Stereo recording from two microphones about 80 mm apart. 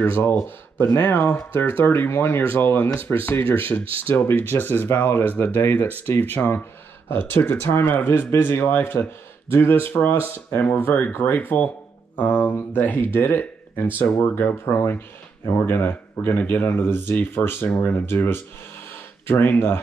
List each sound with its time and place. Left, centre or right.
0.0 s speech: left